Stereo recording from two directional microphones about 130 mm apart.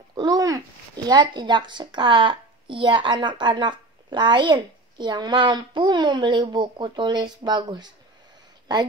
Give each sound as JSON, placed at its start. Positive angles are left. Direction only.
{"t": 0.1, "sound": "speech", "side_deg": -30}